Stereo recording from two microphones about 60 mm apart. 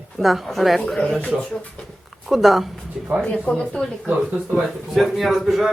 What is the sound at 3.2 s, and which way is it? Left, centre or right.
Speech, left.